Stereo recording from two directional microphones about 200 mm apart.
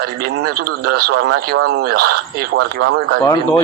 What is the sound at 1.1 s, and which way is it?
Speech, 80° right.